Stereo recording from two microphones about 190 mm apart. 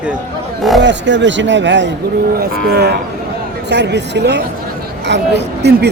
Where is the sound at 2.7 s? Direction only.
60° right (ahead or behind).